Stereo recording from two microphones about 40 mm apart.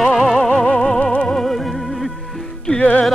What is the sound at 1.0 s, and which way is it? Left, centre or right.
Music, centre.